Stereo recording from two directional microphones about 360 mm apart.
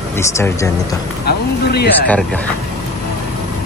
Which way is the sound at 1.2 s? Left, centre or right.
Left.